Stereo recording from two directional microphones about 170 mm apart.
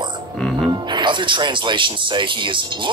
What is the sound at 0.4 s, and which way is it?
Music, centre (ahead or behind).